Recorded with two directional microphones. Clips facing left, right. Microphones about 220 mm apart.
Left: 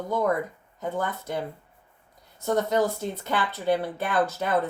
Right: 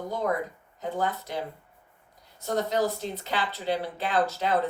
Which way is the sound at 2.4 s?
55° left (ahead or behind).